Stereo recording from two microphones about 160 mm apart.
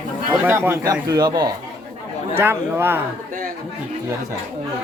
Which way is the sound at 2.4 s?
15° right (ahead or behind).